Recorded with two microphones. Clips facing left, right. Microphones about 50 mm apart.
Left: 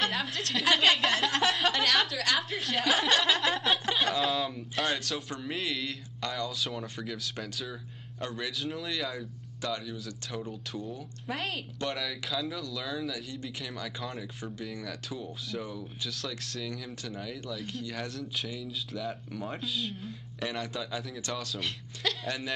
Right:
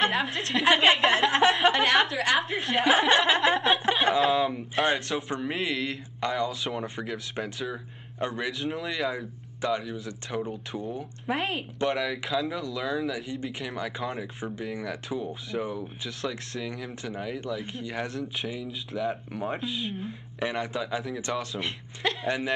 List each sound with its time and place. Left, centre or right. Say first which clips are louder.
0.0 s a woman's voice: right 5 dB; centre
3.7 s chuckle: right 5 dB; right
4.2 s speech: right 6 dB; centre
6.5 s a woman's voice: right 4 dB; centre
7.0 s speech: right 4 dB; right
8.5 s a woman's voice: right 4 dB; centre
8.9 s speech: right 5 dB; right
12.4 s speech: right 5 dB; centre
15.0 s speech: right 7 dB; centre
15.8 s a woman's voice: right 4 dB; centre
21.4 s a woman's voice: right 4 dB; centre